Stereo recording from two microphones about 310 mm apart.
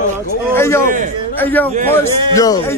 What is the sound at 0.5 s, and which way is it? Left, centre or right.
Speech, centre.